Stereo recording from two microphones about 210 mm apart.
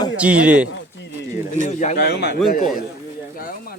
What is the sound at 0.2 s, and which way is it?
Speech, 5° right (ahead or behind).